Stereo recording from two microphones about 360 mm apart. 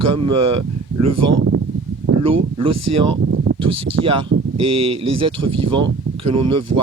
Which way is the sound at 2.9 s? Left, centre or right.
Right.